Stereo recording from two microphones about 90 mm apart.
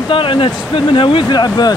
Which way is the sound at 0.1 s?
70° left (ahead or behind).